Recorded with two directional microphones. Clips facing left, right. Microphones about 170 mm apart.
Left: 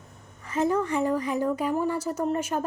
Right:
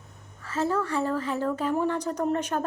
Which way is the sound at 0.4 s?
15° left (ahead or behind).